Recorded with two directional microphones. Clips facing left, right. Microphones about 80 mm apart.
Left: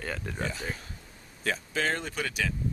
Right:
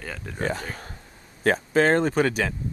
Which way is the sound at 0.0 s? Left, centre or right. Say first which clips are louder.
Left 1 dB; centre.